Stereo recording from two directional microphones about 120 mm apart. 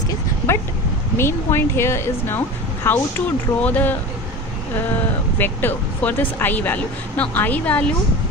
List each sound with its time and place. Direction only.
0.1 s a sound: 20° left (ahead or behind)
1.1 s speech: 20° left (ahead or behind)
5.4 s speech: 15° left (ahead or behind)